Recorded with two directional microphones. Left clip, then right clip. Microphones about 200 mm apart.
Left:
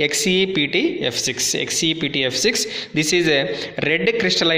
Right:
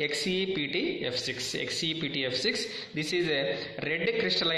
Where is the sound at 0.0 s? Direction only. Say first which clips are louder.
Left 11 dB; 50° left (ahead or behind).